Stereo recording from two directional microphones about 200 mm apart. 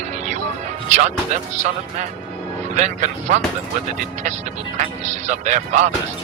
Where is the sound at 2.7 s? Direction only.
35° right (ahead or behind).